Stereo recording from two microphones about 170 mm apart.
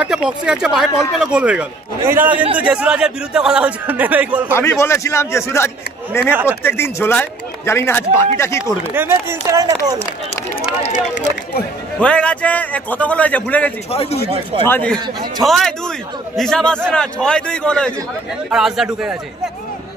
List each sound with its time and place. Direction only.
0.0 s a man's voice: 5° right (ahead or behind)
4.6 s speech: 15° left (ahead or behind)
8.9 s a man's voice: 15° right (ahead or behind)
12.0 s speech: 5° left (ahead or behind)
13.8 s speech: 35° left (ahead or behind)
14.7 s speech: 10° left (ahead or behind)